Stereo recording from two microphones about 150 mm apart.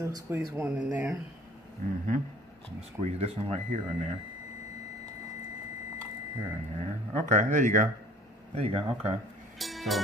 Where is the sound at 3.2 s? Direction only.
40° right (ahead or behind).